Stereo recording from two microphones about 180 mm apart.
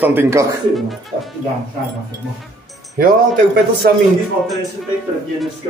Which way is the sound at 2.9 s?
55° right (ahead or behind).